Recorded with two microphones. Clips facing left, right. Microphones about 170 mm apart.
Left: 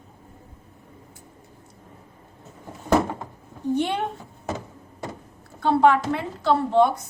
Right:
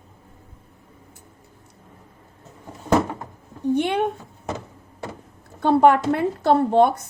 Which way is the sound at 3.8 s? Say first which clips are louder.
Right 2 dB; 60° right (ahead or behind).